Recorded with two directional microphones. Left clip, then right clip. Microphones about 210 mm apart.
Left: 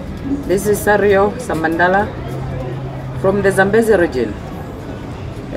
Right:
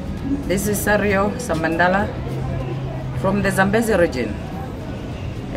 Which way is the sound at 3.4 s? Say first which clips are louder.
Left 6 dB; 35° right (ahead or behind).